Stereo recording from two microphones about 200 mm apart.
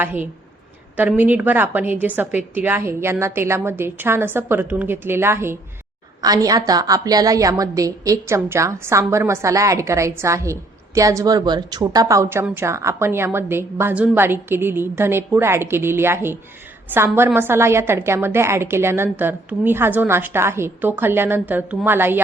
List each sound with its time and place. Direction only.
0.0 s a woman's voice: 10° right (ahead or behind)